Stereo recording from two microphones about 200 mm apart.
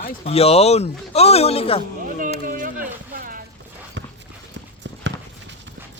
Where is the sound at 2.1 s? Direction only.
40° right (ahead or behind).